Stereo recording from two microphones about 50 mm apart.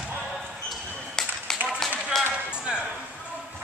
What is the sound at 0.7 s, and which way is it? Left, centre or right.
Basketball bounce, centre.